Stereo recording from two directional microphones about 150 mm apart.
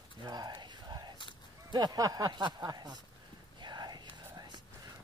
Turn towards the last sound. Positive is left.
turn(degrees=-30)  # may be behind; listen again after turning